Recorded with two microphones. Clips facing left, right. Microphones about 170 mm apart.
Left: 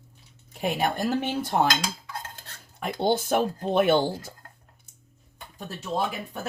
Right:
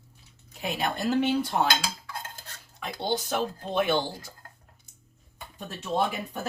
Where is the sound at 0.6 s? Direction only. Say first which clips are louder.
Left 4 dB; 50° left (ahead or behind).